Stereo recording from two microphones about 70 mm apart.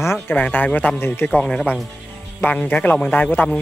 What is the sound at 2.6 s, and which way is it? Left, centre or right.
Speech, left.